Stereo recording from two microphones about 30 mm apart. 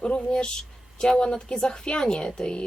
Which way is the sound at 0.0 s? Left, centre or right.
Left.